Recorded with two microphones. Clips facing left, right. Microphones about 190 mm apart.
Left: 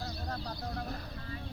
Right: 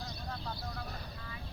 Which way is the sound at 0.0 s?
35° left (ahead or behind).